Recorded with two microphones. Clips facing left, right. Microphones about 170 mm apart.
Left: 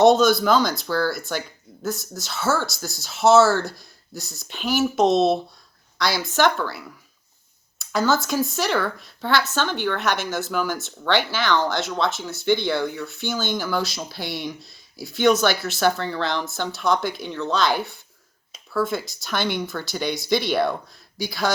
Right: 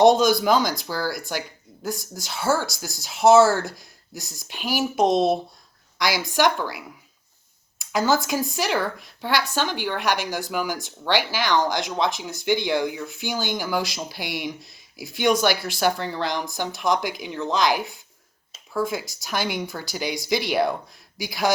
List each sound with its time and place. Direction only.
0.0 s a woman's voice: 15° right (ahead or behind)